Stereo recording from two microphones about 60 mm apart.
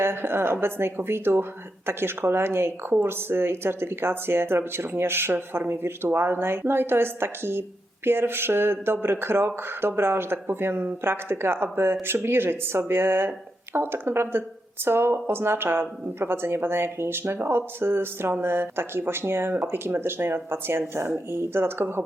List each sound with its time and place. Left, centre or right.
0.0 s speech: right